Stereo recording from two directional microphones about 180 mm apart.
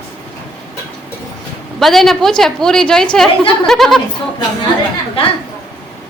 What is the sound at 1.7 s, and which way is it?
A woman's voice, centre (ahead or behind).